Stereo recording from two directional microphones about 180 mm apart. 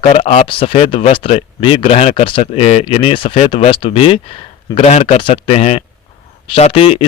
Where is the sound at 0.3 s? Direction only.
30° left (ahead or behind).